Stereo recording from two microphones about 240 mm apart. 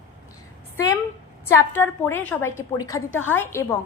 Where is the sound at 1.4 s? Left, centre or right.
Centre.